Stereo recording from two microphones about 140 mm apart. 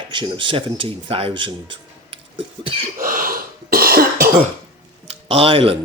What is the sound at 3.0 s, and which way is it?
Cough, 85° right.